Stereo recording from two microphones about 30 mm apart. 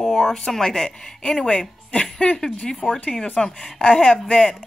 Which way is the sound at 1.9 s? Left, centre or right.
Left.